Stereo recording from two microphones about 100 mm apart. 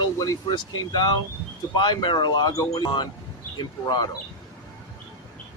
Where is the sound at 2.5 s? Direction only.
40° left (ahead or behind).